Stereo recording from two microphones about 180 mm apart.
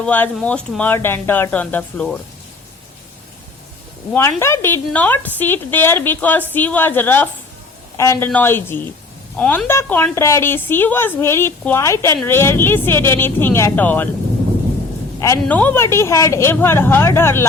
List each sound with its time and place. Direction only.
0.0 s a woman's voice: 10° left (ahead or behind)
4.1 s a woman's voice: 15° left (ahead or behind)
15.2 s a woman's voice: 10° left (ahead or behind)